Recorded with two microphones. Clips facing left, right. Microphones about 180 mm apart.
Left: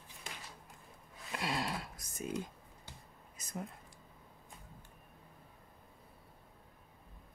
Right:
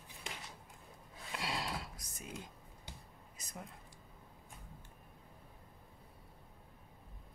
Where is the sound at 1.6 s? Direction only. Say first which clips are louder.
Left 3 dB; 50° left (ahead or behind).